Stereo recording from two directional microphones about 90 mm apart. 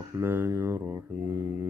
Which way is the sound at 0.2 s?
25° right (ahead or behind).